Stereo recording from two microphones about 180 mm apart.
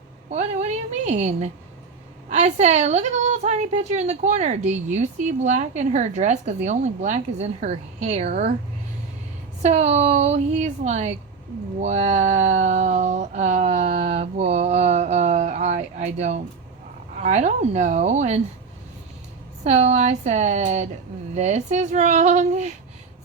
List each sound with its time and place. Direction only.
0.3 s a woman's voice: 40° right (ahead or behind)
9.6 s a woman's voice: 40° right (ahead or behind)
11.8 s a sound: 40° right (ahead or behind)
17.2 s a woman's voice: 40° right (ahead or behind)
19.6 s a woman's voice: 35° right (ahead or behind)